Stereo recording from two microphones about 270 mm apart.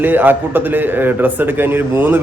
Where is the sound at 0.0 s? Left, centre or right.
Centre.